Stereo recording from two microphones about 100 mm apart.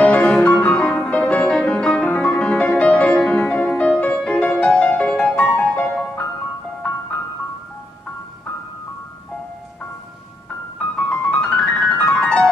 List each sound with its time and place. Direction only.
0.0 s music: 15° left (ahead or behind)
10.8 s piano: 10° left (ahead or behind)
12.1 s music: 10° left (ahead or behind)